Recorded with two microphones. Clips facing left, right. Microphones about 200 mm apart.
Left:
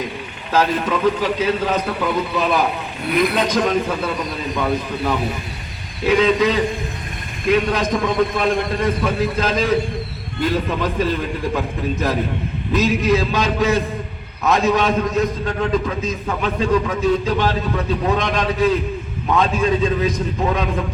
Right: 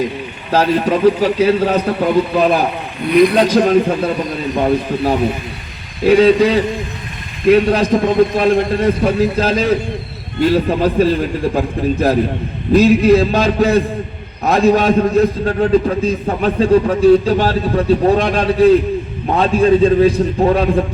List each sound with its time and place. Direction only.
0.5 s a man's voice: 35° right (ahead or behind)